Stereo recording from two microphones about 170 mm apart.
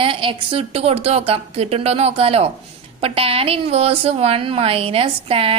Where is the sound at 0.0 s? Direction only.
30° right (ahead or behind).